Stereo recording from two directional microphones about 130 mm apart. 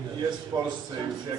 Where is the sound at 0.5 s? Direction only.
30° right (ahead or behind).